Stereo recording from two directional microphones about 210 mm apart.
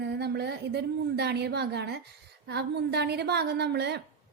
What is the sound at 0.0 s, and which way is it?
A woman's voice, 50° right (ahead or behind).